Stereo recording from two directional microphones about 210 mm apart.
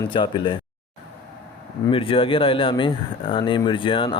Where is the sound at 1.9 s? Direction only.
25° left (ahead or behind).